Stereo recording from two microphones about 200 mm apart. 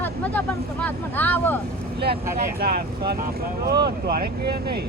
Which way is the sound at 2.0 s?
50° right (ahead or behind).